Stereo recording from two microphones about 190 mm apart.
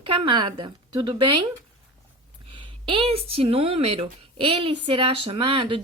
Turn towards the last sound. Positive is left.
turn(degrees=-25)  # may be behind; listen again after turning